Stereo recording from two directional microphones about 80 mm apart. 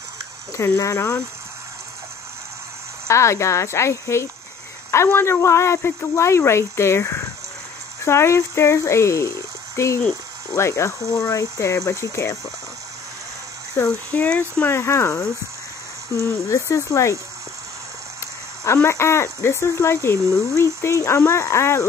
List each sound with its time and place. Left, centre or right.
0.7 s speech: left
3.1 s speech: left
13.8 s speech: left
14.7 s speech: left
18.2 s a sound: left
18.9 s speech: left